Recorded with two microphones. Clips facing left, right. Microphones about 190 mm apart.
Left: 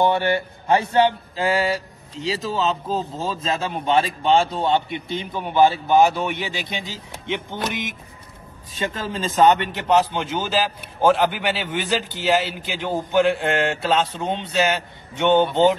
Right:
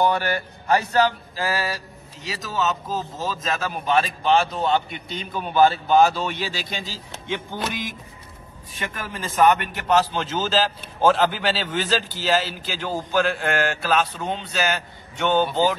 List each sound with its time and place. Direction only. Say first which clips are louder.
0.0 s mantra: left 2 dB; 25° left (ahead or behind)